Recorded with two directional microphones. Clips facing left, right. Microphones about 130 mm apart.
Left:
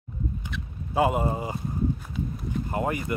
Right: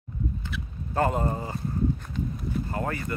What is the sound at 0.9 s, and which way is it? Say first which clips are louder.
Speech: left 2 dB; 10° left (ahead or behind).